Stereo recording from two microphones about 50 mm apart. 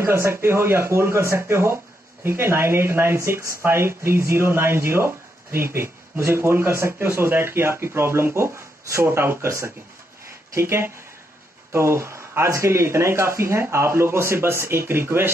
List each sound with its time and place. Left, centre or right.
0.0 s speech: right
3.3 s speech: right
3.6 s speech: right
8.4 s speech: right
9.0 s speech: right
10.5 s speech: right